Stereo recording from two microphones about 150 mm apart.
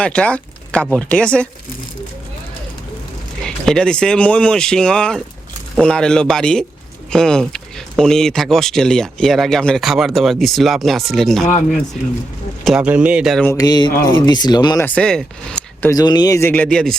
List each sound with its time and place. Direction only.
0.0 s speech: 10° left (ahead or behind)
3.4 s speech: 5° left (ahead or behind)
12.6 s speech: 5° right (ahead or behind)
13.4 s speech: 20° left (ahead or behind)
14.8 s speech: 5° left (ahead or behind)
15.9 s speech: 25° left (ahead or behind); by 17.0 s 5° left (ahead or behind)